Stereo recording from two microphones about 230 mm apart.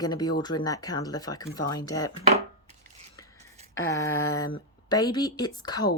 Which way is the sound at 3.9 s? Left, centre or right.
Centre.